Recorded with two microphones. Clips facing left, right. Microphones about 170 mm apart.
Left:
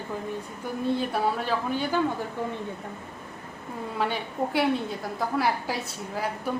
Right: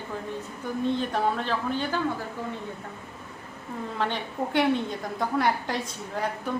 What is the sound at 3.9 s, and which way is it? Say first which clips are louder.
A woman's voice: left 1 dB; 10° left (ahead or behind).